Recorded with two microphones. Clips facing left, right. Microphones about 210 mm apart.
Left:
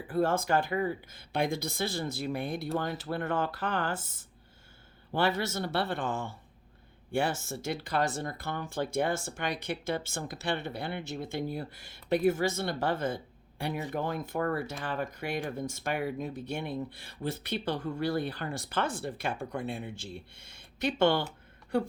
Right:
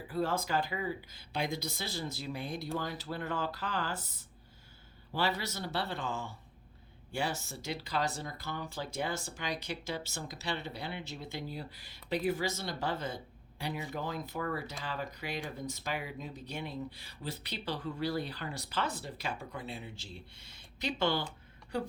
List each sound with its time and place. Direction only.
0.1 s speech: 50° left (ahead or behind)
5.1 s speech: 50° left (ahead or behind)